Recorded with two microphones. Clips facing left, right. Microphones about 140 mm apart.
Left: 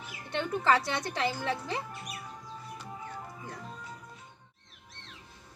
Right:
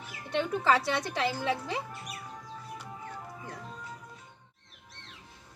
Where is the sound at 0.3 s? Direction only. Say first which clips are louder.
Right 1 dB; 5° right (ahead or behind).